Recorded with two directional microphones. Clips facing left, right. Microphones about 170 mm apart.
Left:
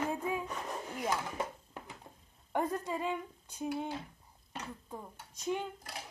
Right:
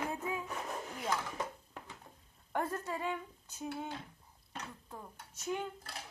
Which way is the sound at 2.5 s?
15° left (ahead or behind).